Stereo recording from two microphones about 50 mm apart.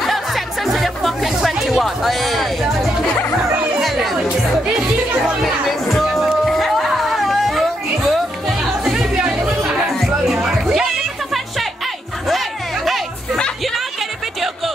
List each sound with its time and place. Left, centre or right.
0.0 s music: centre
3.8 s music: centre
5.4 s music: centre
6.4 s a sound: centre
9.1 s music: right
10.0 s music: centre
12.3 s music: centre